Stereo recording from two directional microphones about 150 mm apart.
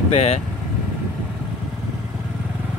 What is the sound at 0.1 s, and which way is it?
Speech, 45° left (ahead or behind).